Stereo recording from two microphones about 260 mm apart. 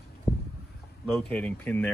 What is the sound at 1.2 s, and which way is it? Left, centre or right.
Speech, centre.